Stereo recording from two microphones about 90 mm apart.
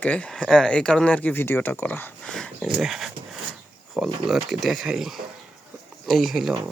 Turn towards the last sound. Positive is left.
turn(degrees=0)  # may be behind; listen again after turning